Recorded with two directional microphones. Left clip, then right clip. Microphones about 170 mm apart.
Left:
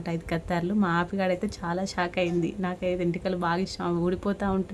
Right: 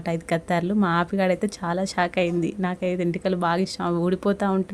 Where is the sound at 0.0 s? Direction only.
25° right (ahead or behind).